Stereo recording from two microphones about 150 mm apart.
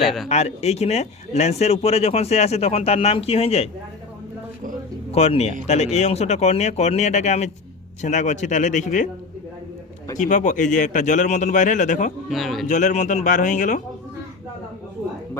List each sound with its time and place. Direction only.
0.3 s speech: 45° left (ahead or behind)
5.1 s speech: 45° left (ahead or behind)
10.2 s speech: 55° left (ahead or behind)
12.3 s speech: centre (ahead or behind)
12.6 s speech: 55° left (ahead or behind)